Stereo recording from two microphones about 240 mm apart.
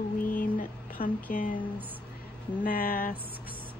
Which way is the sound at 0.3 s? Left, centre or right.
Left.